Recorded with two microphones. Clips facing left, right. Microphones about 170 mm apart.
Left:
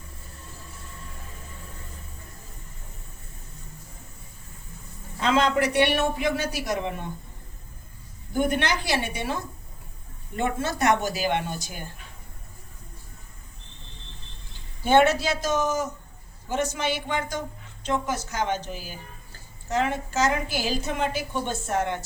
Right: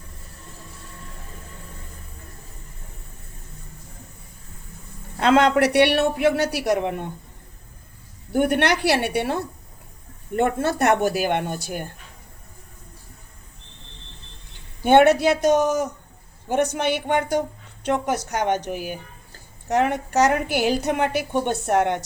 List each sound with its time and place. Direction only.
5.2 s a man's voice: 65° right (ahead or behind)
8.3 s a man's voice: 65° right (ahead or behind)
14.8 s a woman's voice: 60° right (ahead or behind)